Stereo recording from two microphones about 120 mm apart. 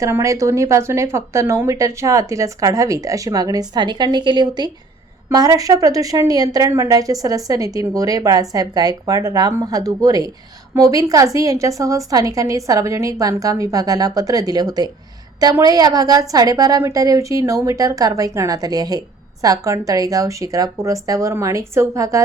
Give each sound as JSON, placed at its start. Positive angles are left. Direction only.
{"t": 0.0, "sound": "a woman's voice", "side_deg": -25}